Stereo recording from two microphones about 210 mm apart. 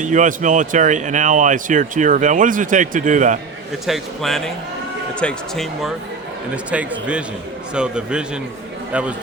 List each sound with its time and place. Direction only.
0.0 s speech: 35° right (ahead or behind)
3.8 s a man's voice: centre (ahead or behind)